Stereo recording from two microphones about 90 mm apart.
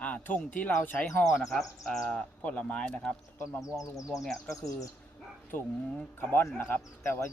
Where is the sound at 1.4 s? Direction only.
Centre (ahead or behind).